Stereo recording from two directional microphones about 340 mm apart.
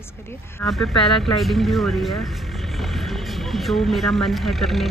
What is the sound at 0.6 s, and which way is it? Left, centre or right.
Speech, centre.